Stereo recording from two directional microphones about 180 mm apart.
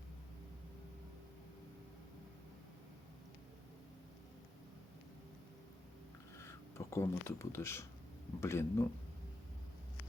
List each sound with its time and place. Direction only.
6.3 s speech: 15° left (ahead or behind)